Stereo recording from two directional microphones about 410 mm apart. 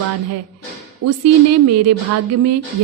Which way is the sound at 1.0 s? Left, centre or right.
Right.